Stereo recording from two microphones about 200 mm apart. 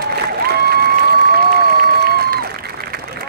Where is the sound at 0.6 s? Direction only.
50° right (ahead or behind).